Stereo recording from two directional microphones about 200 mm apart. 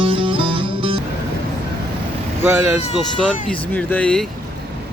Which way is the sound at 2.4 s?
10° right (ahead or behind).